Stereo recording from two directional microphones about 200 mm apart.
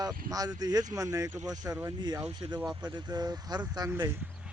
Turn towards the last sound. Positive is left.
turn(degrees=-15)  # may be behind; listen again after turning